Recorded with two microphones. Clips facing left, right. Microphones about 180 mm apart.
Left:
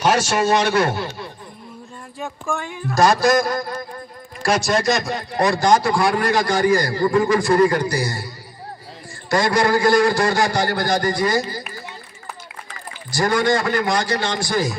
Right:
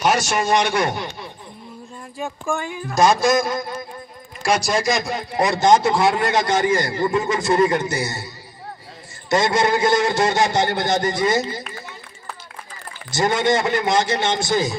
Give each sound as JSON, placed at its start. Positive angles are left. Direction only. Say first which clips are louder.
{"t": 0.0, "sound": "a man's voice", "louder": "left 2 dB", "side_deg": -10}
{"t": 2.1, "sound": "speech", "louder": "right 2 dB", "side_deg": 0}
{"t": 5.5, "sound": "a man's voice", "louder": "right 1 dB", "side_deg": -20}
{"t": 9.3, "sound": "a man's voice", "louder": "left 1 dB", "side_deg": -20}
{"t": 13.1, "sound": "a man's voice", "louder": "even", "side_deg": -20}